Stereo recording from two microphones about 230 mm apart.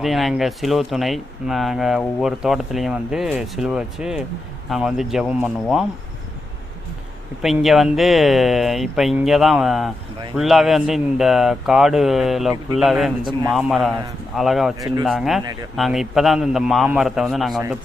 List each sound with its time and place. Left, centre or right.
0.0 s speech: centre
7.4 s speech: centre
13.2 s a man's voice: centre
13.5 s speech: centre